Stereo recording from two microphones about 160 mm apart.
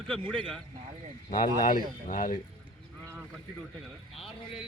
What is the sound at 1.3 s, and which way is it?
Speech, 55° left (ahead or behind).